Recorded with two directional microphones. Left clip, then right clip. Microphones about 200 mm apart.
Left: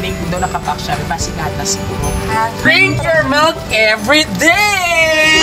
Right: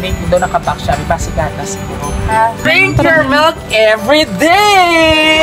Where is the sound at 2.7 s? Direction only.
50° right (ahead or behind).